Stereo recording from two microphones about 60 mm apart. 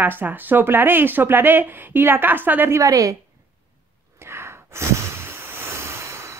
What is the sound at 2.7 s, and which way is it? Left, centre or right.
Speech, right.